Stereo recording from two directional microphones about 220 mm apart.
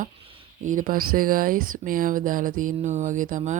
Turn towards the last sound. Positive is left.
turn(degrees=-35)  # may be behind; listen again after turning